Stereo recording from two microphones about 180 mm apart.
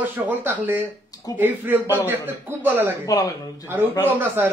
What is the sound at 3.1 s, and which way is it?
Speech, 20° left (ahead or behind).